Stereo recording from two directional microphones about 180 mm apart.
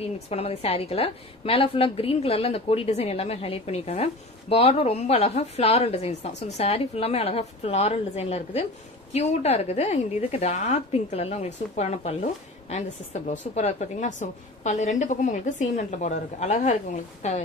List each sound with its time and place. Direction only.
0.3 s a woman's voice: 35° left (ahead or behind)